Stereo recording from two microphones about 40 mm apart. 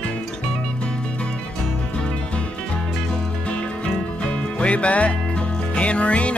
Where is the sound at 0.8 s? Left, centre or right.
Left.